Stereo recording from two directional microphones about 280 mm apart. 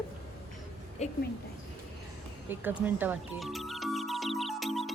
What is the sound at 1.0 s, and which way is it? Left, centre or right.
Speech, left.